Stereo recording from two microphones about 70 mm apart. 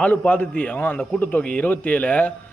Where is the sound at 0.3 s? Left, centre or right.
Left.